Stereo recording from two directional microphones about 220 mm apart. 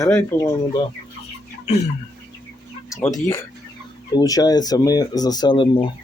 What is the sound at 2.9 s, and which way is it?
Speech, 15° left (ahead or behind).